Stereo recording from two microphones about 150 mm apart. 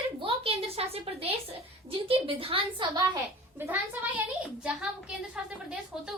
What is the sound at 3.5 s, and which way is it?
A woman's voice, 10° right (ahead or behind).